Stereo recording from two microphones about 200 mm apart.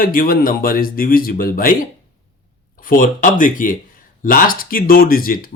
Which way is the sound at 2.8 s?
45° left (ahead or behind).